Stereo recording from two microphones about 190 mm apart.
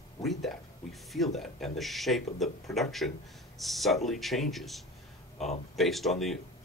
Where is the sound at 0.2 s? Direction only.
Centre (ahead or behind).